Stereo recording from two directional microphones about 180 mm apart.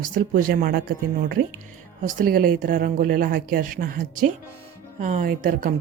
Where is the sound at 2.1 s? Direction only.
50° right (ahead or behind).